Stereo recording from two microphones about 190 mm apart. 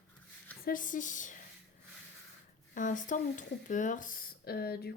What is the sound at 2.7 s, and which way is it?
Speech, 40° left (ahead or behind).